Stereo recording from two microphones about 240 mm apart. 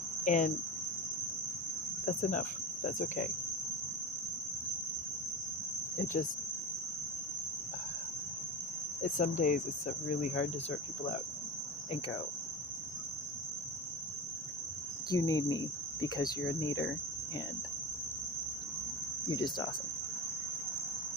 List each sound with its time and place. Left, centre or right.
0.3 s speech: left
2.0 s cricket: left
9.0 s speech: left
15.1 s speech: centre
19.3 s speech: centre